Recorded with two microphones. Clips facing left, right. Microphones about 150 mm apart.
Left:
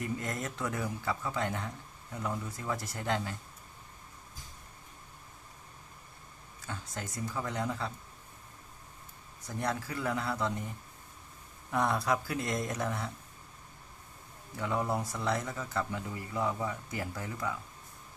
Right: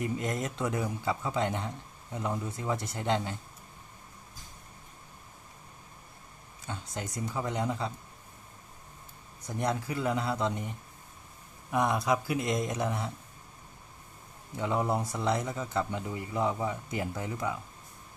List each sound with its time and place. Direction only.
0.0 s speech: 20° right (ahead or behind)
6.7 s speech: 20° right (ahead or behind)
9.5 s speech: 20° right (ahead or behind)
14.5 s speech: 20° right (ahead or behind)